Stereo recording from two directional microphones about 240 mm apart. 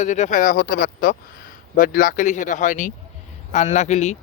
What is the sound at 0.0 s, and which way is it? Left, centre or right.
A man's voice, left.